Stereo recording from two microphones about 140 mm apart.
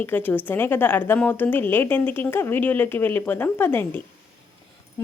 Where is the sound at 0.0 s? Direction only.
15° left (ahead or behind).